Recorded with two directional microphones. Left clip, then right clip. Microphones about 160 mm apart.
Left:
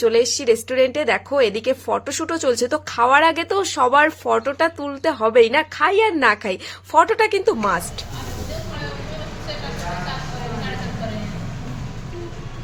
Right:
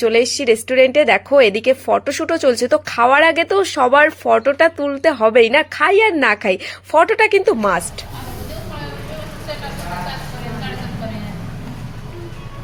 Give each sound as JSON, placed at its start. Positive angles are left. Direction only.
{"t": 0.0, "sound": "a woman's voice", "side_deg": -20}